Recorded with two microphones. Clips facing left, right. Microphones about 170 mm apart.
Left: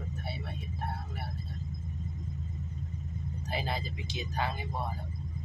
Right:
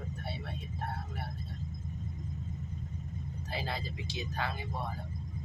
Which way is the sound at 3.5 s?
15° left (ahead or behind).